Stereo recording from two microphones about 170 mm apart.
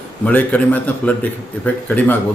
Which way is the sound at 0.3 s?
10° left (ahead or behind).